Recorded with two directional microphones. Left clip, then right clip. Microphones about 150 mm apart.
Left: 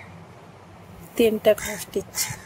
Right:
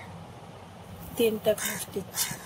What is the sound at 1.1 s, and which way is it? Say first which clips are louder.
Speech: left 7 dB; 90° left.